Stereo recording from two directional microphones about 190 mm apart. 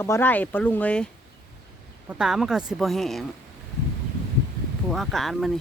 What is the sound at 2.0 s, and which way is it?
Speech, 5° right (ahead or behind).